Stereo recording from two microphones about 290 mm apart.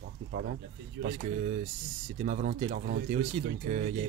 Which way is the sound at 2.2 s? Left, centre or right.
Right.